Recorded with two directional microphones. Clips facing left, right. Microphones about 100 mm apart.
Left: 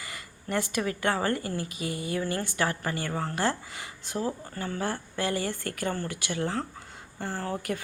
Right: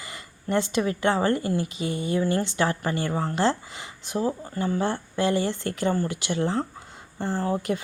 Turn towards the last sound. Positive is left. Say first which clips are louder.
# right 6 dB
turn(degrees=-20)  # may be behind; listen again after turning